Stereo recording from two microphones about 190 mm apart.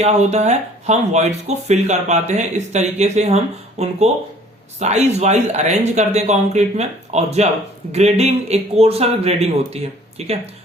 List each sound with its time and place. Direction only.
0.0 s speech: 35° right (ahead or behind)